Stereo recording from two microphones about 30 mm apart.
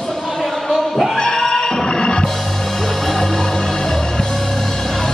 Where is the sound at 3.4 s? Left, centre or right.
Left.